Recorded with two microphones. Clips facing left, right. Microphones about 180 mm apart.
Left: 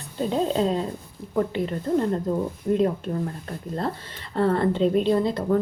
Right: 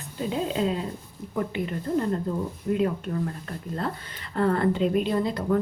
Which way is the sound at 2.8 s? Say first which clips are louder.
Left 1 dB; 30° left (ahead or behind).